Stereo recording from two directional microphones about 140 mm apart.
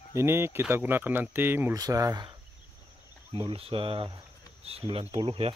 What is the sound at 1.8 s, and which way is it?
Speech, 25° right (ahead or behind).